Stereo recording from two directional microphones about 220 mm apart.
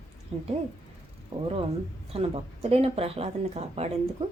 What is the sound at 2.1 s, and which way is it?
A woman's voice, 25° right (ahead or behind).